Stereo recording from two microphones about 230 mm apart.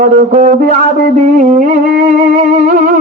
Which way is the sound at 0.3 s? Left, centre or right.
Right.